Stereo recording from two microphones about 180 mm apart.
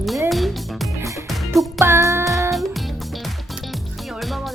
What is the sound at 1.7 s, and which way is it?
Speech, 15° right (ahead or behind).